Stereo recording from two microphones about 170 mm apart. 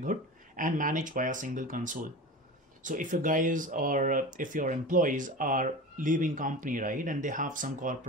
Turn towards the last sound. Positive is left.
turn(degrees=-50)  # may be behind; listen again after turning